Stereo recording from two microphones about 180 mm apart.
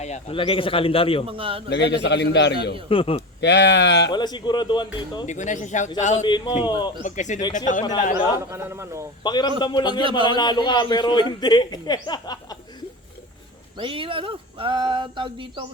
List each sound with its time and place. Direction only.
0.0 s speech: 35° left (ahead or behind)
1.3 s speech: 30° right (ahead or behind)
1.7 s a man's voice: 75° left (ahead or behind)
2.9 s speech: 30° left (ahead or behind)
3.4 s a man's voice: 70° left (ahead or behind)
4.1 s a man's voice: 25° left (ahead or behind)
5.2 s speech: 40° left (ahead or behind)
6.2 s a man's voice: 25° left (ahead or behind)
7.0 s speech: 40° left (ahead or behind)
8.1 s speech: 15° right (ahead or behind)
9.2 s a man's voice: 25° left (ahead or behind)
10.0 s speech: 30° right (ahead or behind)
10.2 s a man's voice: 25° left (ahead or behind)
13.7 s speech: 30° right (ahead or behind)